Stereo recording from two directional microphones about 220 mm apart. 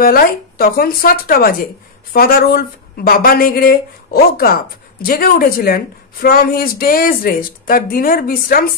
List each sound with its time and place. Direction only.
0.0 s speech: 40° left (ahead or behind)